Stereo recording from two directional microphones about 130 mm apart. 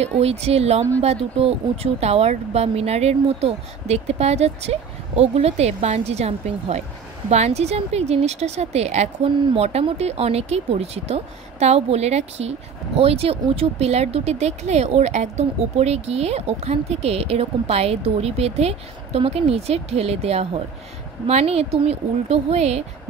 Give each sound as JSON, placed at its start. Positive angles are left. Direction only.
{"t": 0.0, "sound": "speech", "side_deg": -50}